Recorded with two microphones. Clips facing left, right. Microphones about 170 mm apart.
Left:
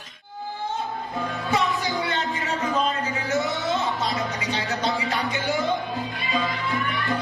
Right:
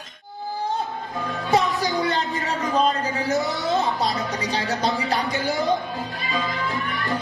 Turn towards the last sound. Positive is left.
turn(degrees=-35)  # may be behind; listen again after turning